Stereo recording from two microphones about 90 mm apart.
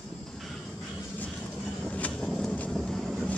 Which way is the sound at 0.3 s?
Centre (ahead or behind).